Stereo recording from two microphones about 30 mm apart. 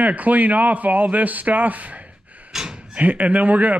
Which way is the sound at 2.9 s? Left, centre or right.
Right.